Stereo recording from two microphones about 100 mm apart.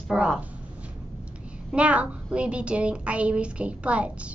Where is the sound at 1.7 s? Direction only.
10° right (ahead or behind).